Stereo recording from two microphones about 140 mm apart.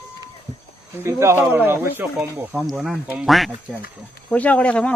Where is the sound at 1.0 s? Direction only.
20° right (ahead or behind).